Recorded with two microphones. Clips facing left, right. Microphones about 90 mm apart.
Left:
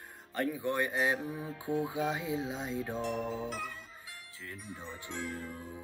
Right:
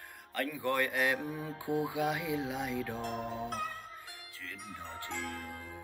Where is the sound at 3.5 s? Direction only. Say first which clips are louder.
Right 2 dB; 50° right (ahead or behind).